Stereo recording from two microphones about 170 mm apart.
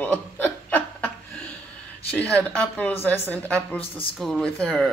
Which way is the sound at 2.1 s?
10° left (ahead or behind).